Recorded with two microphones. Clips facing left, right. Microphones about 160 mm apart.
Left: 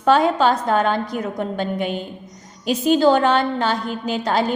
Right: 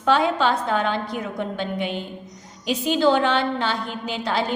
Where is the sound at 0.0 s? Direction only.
45° left (ahead or behind).